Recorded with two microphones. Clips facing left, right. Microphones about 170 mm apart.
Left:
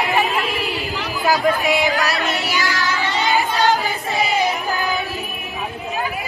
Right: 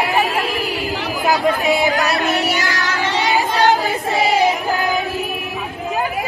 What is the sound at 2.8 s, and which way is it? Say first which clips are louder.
Child singing: right 3 dB; 65° right (ahead or behind).